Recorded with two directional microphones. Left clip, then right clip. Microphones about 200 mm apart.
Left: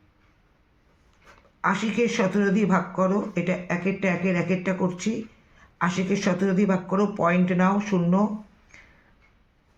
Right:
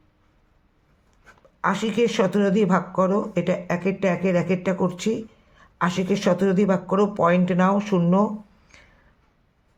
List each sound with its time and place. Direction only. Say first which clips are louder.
1.6 s speech: right 2 dB; 50° right (ahead or behind)